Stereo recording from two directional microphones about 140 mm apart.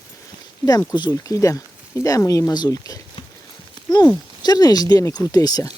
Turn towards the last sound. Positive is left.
turn(degrees=30)  # may be behind; listen again after turning